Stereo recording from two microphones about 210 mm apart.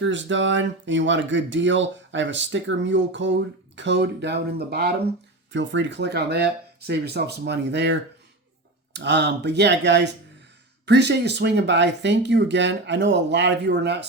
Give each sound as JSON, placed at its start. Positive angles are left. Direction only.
{"t": 0.0, "sound": "speech", "side_deg": -60}